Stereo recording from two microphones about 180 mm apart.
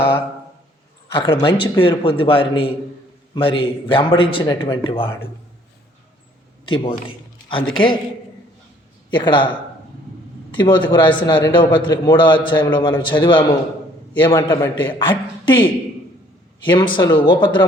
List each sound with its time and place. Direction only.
1.1 s a man's voice: 25° left (ahead or behind)
6.7 s a man's voice: 30° left (ahead or behind)
9.1 s a man's voice: 25° left (ahead or behind)